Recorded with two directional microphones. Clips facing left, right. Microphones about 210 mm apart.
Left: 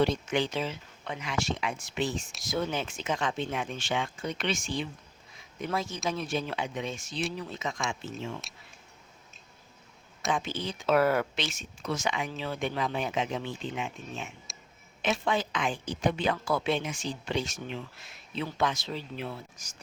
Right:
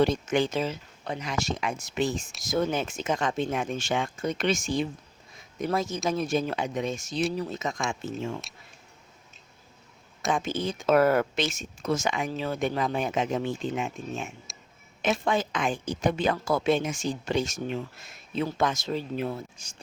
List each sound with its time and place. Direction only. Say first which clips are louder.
0.0 s a woman's voice: right 3 dB; 45° right (ahead or behind)
10.2 s a woman's voice: right 4 dB; 45° right (ahead or behind)
14.5 s a sound: right 1 dB; centre (ahead or behind)
15.0 s a woman's voice: right 3 dB; 45° right (ahead or behind)
19.6 s speech: right 1 dB; 30° right (ahead or behind)